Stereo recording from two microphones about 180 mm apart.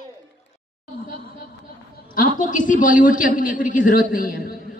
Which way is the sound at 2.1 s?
50° left (ahead or behind).